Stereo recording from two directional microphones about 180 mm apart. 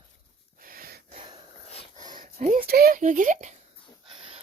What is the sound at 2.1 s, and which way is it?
Speech, 45° right (ahead or behind).